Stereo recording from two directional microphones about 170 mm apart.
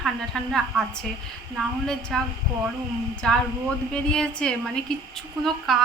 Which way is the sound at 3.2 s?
5° left (ahead or behind).